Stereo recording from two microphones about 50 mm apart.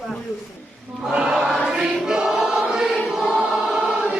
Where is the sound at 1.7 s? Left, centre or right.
Centre.